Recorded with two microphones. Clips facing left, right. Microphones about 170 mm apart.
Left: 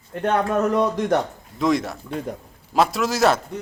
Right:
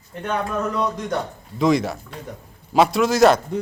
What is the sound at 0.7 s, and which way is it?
Speech, 45° left (ahead or behind).